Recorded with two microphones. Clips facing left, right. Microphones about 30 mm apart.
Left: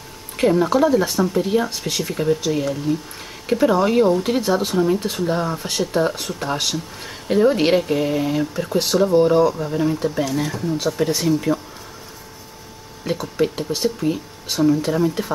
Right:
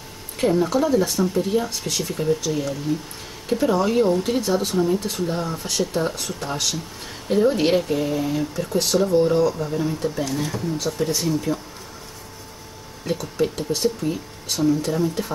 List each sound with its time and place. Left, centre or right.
0.4 s speech: centre
10.2 s speech: centre
13.0 s speech: centre